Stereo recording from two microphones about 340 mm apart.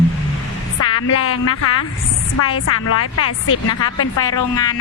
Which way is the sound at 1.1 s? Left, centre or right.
Left.